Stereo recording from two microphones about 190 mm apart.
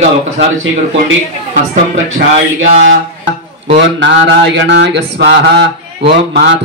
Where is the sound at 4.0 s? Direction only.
70° right (ahead or behind).